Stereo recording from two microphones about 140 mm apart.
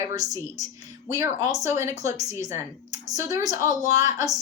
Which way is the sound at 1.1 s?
25° right (ahead or behind).